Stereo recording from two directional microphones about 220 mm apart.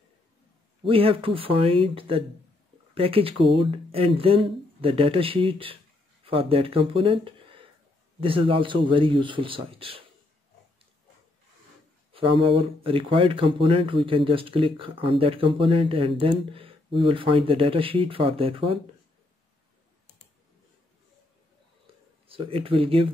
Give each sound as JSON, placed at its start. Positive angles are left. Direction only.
{"t": 0.8, "sound": "speech", "side_deg": -25}
{"t": 12.1, "sound": "speech", "side_deg": -25}
{"t": 22.3, "sound": "speech", "side_deg": -25}